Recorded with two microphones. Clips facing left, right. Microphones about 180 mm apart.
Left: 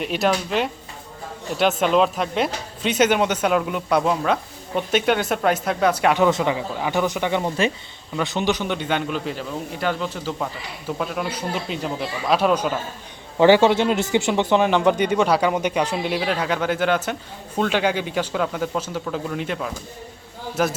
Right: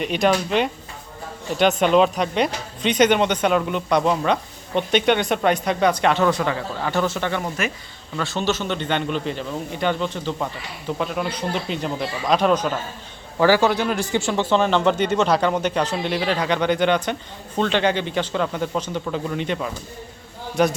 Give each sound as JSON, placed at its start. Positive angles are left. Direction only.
{"t": 0.0, "sound": "speech", "side_deg": 0}
{"t": 7.4, "sound": "speech", "side_deg": 30}
{"t": 8.1, "sound": "speech", "side_deg": 15}
{"t": 13.4, "sound": "speech", "side_deg": 20}